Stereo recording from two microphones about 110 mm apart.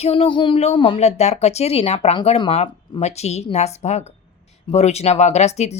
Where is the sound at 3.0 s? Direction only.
80° left.